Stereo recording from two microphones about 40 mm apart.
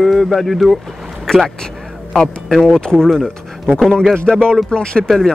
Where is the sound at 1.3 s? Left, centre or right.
Centre.